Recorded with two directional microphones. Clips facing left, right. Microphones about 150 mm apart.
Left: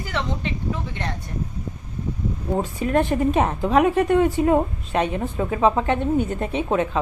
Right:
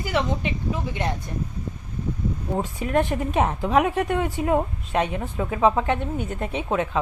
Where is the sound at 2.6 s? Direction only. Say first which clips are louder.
Left 2 dB; 10° right (ahead or behind).